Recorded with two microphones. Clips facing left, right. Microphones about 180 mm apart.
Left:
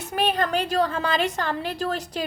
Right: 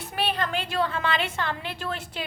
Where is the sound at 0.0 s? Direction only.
45° left (ahead or behind).